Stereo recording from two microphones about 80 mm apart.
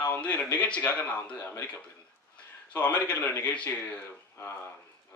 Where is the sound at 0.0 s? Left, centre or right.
Centre.